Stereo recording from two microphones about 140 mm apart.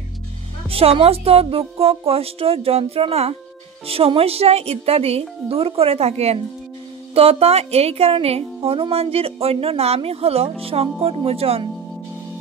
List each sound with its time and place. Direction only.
0.7 s speech: 45° right (ahead or behind)